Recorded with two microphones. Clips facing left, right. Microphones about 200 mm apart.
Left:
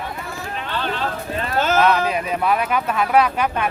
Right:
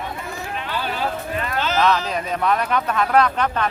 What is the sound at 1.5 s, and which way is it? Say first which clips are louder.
Speech: left 5 dB; 50° left (ahead or behind).